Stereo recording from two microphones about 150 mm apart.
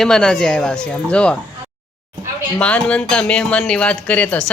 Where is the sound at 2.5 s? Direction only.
10° left (ahead or behind).